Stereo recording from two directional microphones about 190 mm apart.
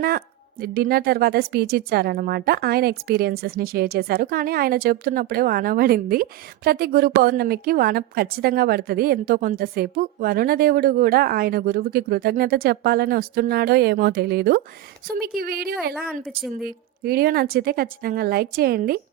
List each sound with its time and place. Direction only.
0.6 s a woman's voice: 50° right (ahead or behind)